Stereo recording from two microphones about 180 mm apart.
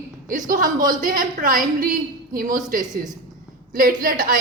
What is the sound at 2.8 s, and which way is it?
Speech, 20° right (ahead or behind).